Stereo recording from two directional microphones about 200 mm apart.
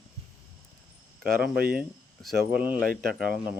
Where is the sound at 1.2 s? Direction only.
50° right (ahead or behind).